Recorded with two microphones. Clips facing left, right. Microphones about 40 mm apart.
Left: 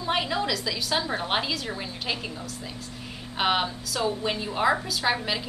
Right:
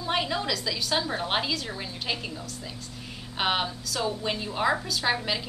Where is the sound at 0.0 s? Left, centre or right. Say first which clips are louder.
Left 2 dB; centre.